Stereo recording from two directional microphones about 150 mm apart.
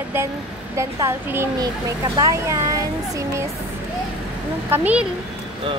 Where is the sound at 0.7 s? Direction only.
20° right (ahead or behind).